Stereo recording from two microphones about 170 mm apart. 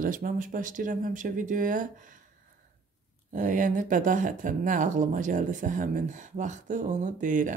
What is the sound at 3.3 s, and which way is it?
Speech, 50° right (ahead or behind).